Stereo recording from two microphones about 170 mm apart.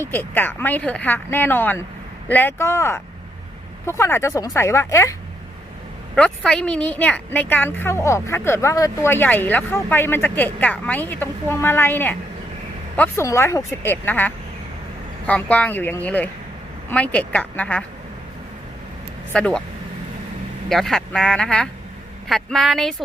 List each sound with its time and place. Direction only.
0.0 s a woman's voice: 10° left (ahead or behind)
6.1 s a woman's voice: 5° left (ahead or behind)
19.3 s speech: 5° left (ahead or behind)
20.7 s speech: centre (ahead or behind)